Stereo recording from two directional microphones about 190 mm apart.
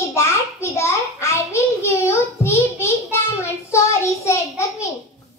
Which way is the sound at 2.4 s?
15° left (ahead or behind).